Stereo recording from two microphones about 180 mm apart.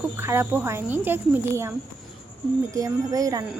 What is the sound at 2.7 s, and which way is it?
Speech, 20° right (ahead or behind).